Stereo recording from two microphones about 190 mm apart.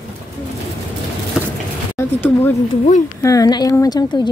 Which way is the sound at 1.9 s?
10° left (ahead or behind).